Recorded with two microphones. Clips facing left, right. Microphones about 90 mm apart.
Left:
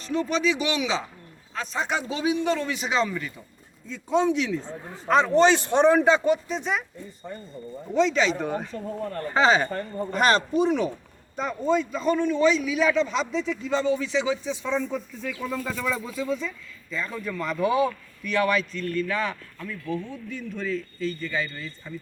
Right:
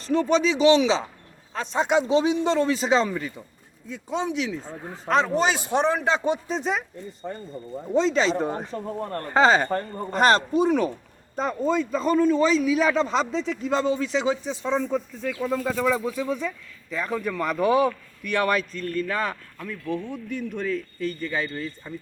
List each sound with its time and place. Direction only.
0.0 s a man's voice: 35° right (ahead or behind)
4.1 s speech: centre (ahead or behind)
6.2 s speech: 25° right (ahead or behind)
6.6 s a man's voice: 40° right (ahead or behind)
7.9 s a man's voice: 35° right (ahead or behind)
13.5 s a man's voice: 50° right (ahead or behind)
16.4 s speech: 50° right (ahead or behind)
16.9 s speech: 65° right (ahead or behind)